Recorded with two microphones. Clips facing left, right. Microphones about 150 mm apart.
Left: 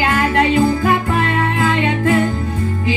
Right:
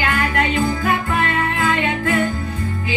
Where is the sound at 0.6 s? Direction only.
40° left (ahead or behind).